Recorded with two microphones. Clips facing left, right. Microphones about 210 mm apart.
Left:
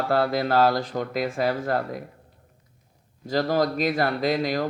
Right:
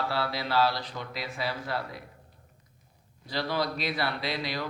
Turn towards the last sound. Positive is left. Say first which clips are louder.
# left 9 dB
turn(degrees=45)  # may be behind; listen again after turning